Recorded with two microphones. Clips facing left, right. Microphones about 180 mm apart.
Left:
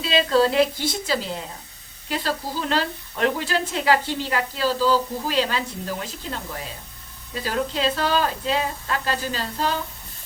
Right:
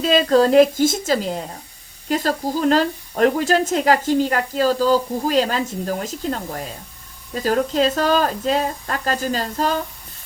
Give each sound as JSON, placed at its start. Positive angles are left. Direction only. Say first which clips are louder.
{"t": 0.0, "sound": "speech", "louder": "right 4 dB", "side_deg": -45}